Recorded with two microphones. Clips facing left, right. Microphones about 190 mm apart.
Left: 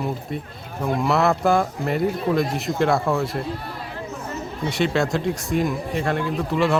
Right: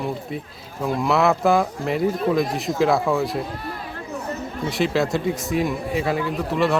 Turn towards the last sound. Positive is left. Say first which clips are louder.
# even
turn(degrees=0)  # may be behind; listen again after turning